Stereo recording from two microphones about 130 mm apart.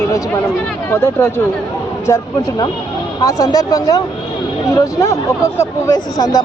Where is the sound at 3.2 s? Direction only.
25° left (ahead or behind).